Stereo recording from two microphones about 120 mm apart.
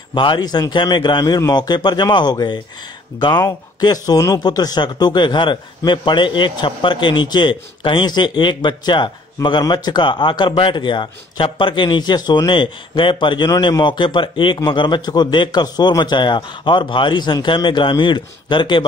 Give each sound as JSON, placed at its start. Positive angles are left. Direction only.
{"t": 0.1, "sound": "speech", "side_deg": 40}